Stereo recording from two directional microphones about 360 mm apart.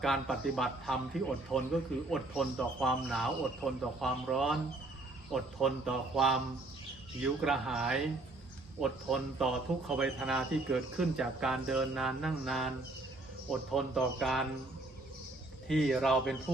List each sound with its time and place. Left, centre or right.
0.0 s a man's voice: centre
15.6 s a man's voice: centre